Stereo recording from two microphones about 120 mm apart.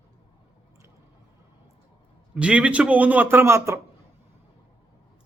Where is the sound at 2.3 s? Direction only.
10° right (ahead or behind).